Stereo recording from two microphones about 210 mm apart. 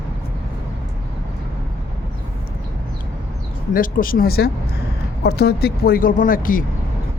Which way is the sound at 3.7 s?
40° left (ahead or behind).